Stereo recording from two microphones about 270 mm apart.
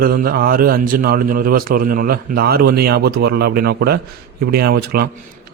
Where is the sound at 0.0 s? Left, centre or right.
Right.